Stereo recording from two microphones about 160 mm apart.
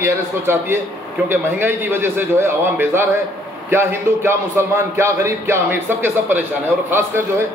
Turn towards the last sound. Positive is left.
turn(degrees=-15)  # may be behind; listen again after turning